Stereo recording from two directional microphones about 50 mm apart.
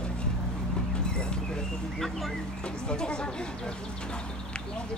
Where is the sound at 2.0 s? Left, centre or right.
Centre.